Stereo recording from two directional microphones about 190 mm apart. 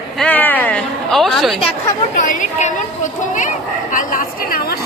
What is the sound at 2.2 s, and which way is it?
A woman's voice, 40° left (ahead or behind).